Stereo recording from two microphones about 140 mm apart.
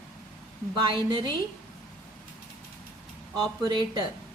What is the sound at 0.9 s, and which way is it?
Speech, 35° right (ahead or behind).